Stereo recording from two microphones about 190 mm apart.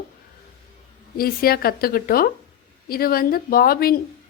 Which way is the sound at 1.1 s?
50° left (ahead or behind).